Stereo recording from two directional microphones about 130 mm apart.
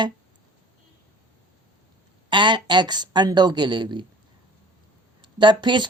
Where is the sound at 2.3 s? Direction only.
35° right (ahead or behind).